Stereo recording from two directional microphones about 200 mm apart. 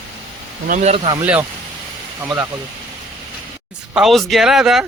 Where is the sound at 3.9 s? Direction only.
Centre (ahead or behind).